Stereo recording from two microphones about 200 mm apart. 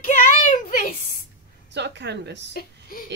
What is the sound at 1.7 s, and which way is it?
Speech, 60° right (ahead or behind).